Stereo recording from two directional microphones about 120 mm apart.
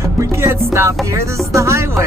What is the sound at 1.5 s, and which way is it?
Speech, 25° right (ahead or behind).